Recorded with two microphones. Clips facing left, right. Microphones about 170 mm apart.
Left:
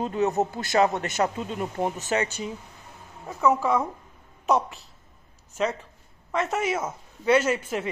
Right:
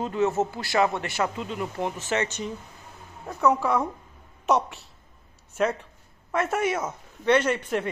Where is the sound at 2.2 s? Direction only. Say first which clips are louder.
Even; 10° left (ahead or behind).